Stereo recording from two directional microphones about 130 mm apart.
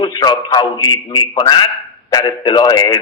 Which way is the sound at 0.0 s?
35° left (ahead or behind).